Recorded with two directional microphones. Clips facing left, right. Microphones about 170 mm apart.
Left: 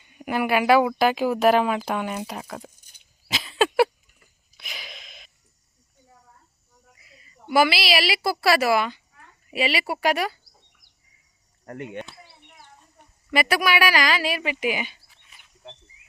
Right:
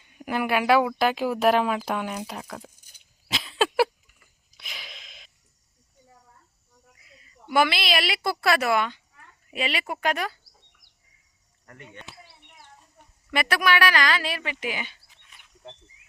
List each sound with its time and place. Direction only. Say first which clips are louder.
0.1 s speech: left 2 dB; centre (ahead or behind)
3.2 s a sound: left 3 dB; centre (ahead or behind)
7.0 s a woman's voice: left 3 dB; 5° left (ahead or behind)
11.6 s speech: left 12 dB; 50° left (ahead or behind)
13.3 s speech: left 2 dB; 5° left (ahead or behind)
15.2 s a sound: right 2 dB; 5° left (ahead or behind)